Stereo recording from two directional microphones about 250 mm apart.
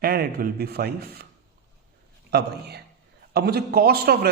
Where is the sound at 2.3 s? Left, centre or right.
Right.